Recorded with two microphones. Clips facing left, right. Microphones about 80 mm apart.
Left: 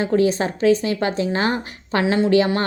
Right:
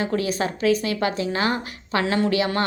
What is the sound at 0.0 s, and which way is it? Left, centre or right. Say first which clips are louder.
A woman's voice: left 5 dB; left.